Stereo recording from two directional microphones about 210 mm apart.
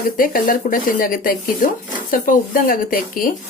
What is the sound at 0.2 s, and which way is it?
Speech, 40° left (ahead or behind).